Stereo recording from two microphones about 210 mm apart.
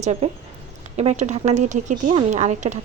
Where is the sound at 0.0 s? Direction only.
30° right (ahead or behind).